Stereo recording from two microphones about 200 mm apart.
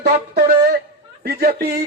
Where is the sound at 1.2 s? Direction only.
50° right (ahead or behind).